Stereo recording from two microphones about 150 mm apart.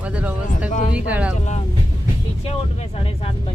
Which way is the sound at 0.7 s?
55° left (ahead or behind).